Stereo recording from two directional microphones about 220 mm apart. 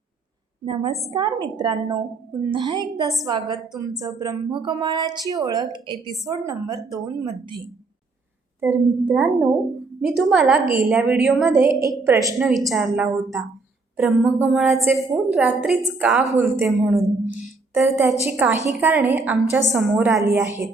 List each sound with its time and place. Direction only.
0.6 s a woman's voice: 25° right (ahead or behind)
8.6 s a woman's voice: 10° right (ahead or behind)
16.6 s a woman's voice: centre (ahead or behind)